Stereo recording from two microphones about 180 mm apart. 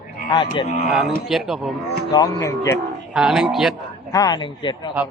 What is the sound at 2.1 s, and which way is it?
Speech, 20° left (ahead or behind).